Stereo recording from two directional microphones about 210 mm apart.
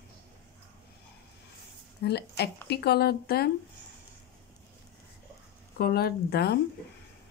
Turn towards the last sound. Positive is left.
turn(degrees=50)  # may be behind; listen again after turning